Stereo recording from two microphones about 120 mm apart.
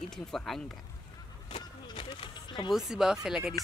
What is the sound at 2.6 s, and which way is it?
Speech, 5° right (ahead or behind).